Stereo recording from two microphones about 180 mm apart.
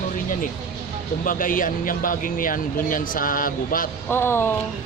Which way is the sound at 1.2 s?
50° left (ahead or behind).